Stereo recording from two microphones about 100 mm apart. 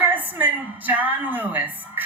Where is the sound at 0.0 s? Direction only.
15° right (ahead or behind).